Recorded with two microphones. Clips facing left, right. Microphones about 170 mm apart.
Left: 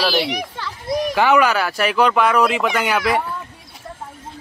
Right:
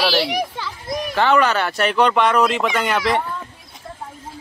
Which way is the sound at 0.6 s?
15° right (ahead or behind).